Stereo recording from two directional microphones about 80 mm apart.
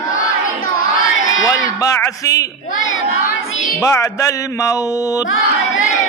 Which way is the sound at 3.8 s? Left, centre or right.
Left.